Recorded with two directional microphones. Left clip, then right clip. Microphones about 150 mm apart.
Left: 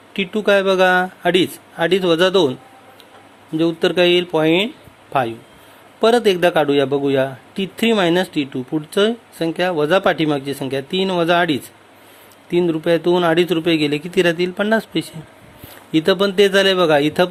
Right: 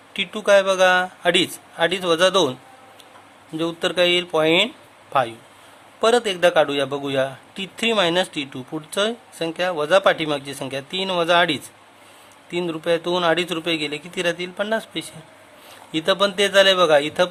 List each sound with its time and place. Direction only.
0.1 s speech: 10° left (ahead or behind)
6.0 s speech: 15° left (ahead or behind)